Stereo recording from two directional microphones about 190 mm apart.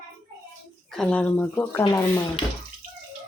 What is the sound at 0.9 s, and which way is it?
Speech, 5° left (ahead or behind).